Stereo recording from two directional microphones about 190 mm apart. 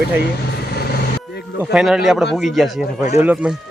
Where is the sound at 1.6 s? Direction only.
5° right (ahead or behind).